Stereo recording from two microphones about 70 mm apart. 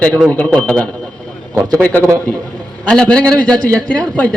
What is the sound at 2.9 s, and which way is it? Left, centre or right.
A man's voice, centre.